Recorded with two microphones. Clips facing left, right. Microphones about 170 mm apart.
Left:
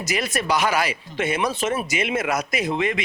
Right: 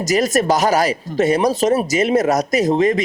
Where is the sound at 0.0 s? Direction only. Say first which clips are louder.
Right 9 dB; 40° right (ahead or behind).